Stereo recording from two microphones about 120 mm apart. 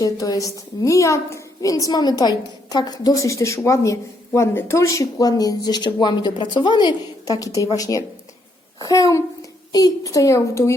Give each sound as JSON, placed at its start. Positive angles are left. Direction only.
{"t": 0.0, "sound": "a woman's voice", "side_deg": 30}